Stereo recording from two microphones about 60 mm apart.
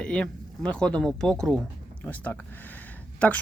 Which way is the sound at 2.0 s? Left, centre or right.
Left.